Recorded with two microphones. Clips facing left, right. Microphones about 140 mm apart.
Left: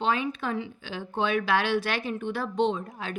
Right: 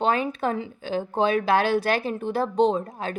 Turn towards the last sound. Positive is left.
turn(degrees=-40)  # may be behind; listen again after turning